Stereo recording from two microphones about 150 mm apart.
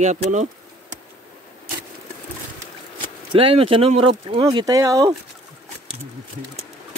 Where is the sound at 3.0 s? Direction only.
35° right (ahead or behind).